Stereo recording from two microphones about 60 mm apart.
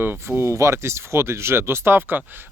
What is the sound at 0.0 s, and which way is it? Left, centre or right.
Speech, right.